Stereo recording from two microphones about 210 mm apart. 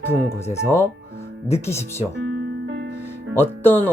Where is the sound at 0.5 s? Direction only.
10° left (ahead or behind).